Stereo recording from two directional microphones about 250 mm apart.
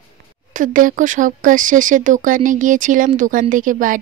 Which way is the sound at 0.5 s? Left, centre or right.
Right.